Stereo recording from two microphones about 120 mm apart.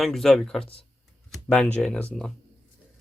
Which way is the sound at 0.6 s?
50° left (ahead or behind).